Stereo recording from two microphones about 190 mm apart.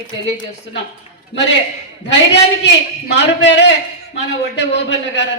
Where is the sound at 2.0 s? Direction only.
65° left (ahead or behind).